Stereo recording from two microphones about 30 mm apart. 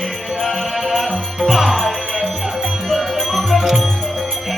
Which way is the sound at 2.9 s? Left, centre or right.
Centre.